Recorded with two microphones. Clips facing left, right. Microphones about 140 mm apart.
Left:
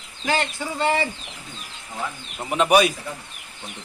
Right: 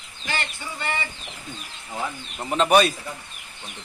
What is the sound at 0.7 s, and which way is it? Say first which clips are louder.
Speech: left 8 dB; 90° left.